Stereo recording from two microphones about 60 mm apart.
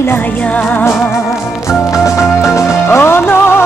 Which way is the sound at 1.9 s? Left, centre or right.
Left.